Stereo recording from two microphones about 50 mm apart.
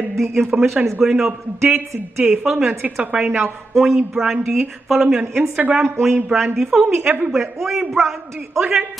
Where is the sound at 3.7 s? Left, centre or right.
Centre.